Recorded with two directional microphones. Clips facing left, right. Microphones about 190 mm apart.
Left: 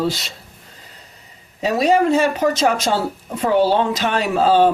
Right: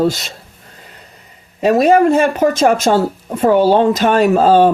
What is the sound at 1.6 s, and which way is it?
Speech, 55° right (ahead or behind).